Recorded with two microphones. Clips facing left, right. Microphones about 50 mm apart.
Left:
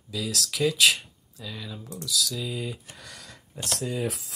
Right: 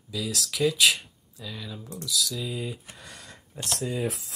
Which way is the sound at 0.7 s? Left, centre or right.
Centre.